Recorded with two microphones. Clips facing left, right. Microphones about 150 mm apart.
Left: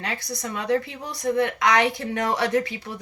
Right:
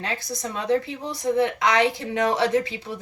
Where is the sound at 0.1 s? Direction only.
25° right (ahead or behind).